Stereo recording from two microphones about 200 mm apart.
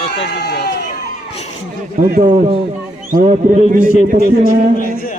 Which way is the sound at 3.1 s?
40° right (ahead or behind).